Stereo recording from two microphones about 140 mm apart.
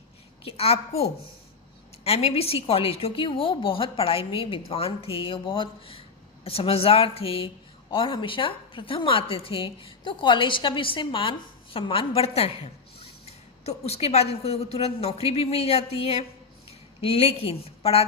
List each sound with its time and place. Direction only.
0.4 s a woman's voice: 45° left (ahead or behind)
2.0 s a woman's voice: 45° left (ahead or behind)